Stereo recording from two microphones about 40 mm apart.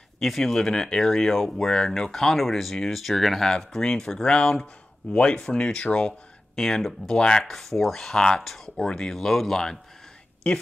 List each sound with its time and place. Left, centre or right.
0.2 s speech: centre
5.1 s speech: left
7.4 s speech: centre
10.4 s speech: left